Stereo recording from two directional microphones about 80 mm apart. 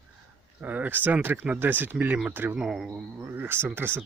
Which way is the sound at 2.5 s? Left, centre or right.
Centre.